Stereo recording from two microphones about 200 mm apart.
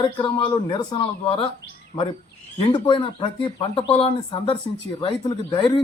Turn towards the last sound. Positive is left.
turn(degrees=25)  # may be behind; listen again after turning